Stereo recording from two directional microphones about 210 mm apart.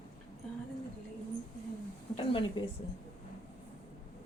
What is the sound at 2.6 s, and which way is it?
Speech, 25° left (ahead or behind).